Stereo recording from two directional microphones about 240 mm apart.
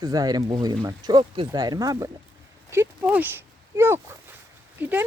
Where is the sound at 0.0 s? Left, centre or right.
Centre.